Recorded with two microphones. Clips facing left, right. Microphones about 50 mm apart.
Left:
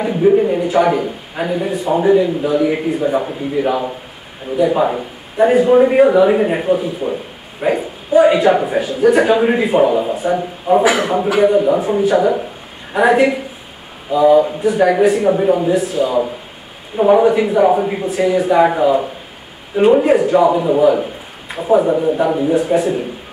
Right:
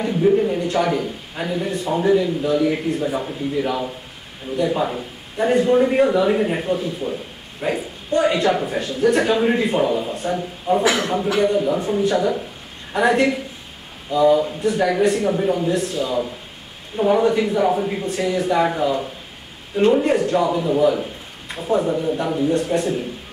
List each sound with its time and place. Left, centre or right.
0.0 s a man's voice: centre
0.6 s a man's voice: centre
0.8 s a man's voice: centre
10.8 s a man's voice: left